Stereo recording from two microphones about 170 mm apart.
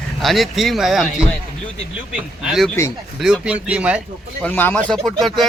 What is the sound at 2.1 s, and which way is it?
A man's voice, 5° right (ahead or behind).